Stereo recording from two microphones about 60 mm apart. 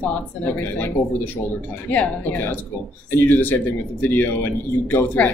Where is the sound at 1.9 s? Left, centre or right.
Left.